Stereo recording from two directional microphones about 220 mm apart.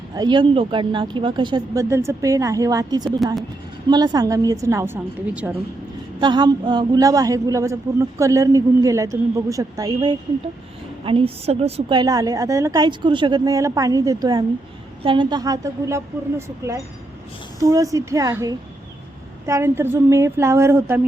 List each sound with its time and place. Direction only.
0.1 s a woman's voice: 20° right (ahead or behind)
6.1 s a woman's voice: 20° right (ahead or behind)
17.6 s a woman's voice: 15° right (ahead or behind)